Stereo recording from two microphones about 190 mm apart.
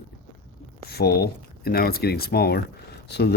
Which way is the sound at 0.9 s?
55° left (ahead or behind).